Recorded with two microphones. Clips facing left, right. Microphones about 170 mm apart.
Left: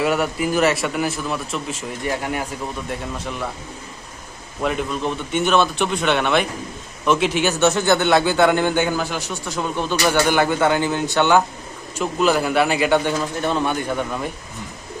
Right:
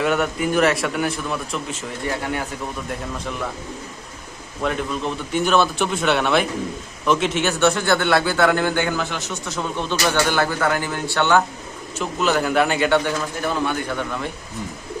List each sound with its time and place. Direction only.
0.0 s a man's voice: 5° left (ahead or behind)
4.6 s a man's voice: centre (ahead or behind)
7.4 s a man's voice: 20° left (ahead or behind)
9.1 s a man's voice: centre (ahead or behind)
9.9 s a man's voice: 15° left (ahead or behind)
12.9 s speech: 20° left (ahead or behind)